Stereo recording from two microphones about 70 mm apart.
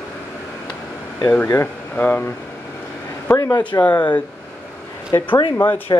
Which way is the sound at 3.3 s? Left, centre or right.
Left.